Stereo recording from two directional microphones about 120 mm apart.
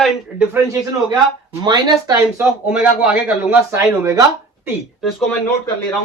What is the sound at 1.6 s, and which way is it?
Speech, 35° right (ahead or behind).